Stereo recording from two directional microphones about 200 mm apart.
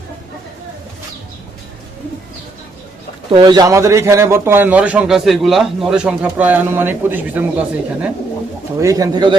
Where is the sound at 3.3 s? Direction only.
20° right (ahead or behind).